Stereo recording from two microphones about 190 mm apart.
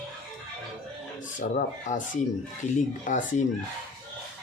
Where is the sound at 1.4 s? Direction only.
40° left (ahead or behind).